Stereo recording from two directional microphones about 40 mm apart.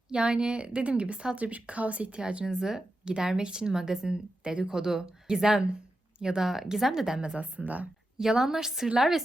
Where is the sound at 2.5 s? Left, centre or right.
Centre.